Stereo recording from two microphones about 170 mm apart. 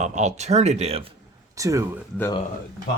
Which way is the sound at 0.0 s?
45° right (ahead or behind).